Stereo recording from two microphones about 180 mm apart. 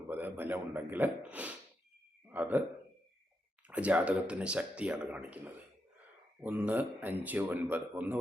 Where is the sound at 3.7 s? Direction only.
5° right (ahead or behind).